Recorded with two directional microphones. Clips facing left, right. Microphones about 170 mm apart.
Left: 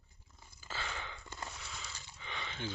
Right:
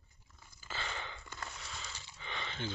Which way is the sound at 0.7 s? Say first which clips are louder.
Even; 5° left (ahead or behind).